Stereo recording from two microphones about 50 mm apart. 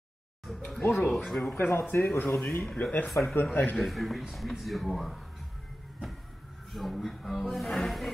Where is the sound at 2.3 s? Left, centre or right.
Left.